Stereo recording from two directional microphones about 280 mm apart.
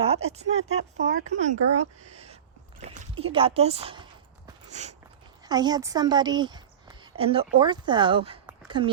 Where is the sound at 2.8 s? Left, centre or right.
Right.